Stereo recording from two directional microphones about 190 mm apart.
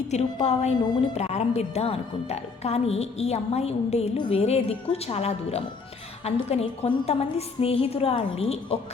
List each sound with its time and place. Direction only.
0.1 s a woman's voice: 35° left (ahead or behind)